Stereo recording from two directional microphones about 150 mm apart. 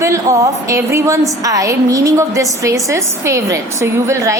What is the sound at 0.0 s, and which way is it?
A woman's voice, 20° right (ahead or behind).